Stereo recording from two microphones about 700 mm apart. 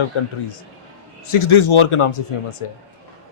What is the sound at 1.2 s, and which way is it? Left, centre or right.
Speech, left.